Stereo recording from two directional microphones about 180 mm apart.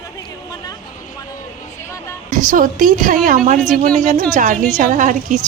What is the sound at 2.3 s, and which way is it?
A woman's voice, 45° right (ahead or behind).